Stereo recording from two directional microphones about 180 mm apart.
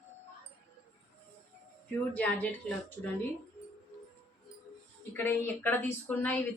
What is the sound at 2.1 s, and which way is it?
Speech, 10° left (ahead or behind).